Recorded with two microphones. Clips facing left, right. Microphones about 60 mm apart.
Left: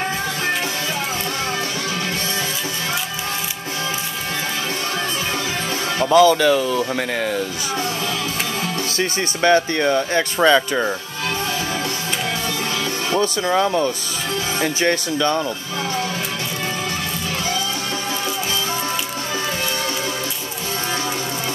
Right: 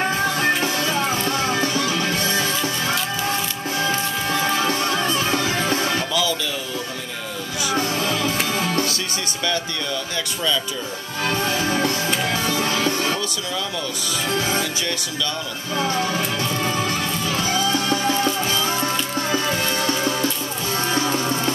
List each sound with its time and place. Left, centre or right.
5.9 s speech: left
9.4 s speech: left
13.1 s speech: left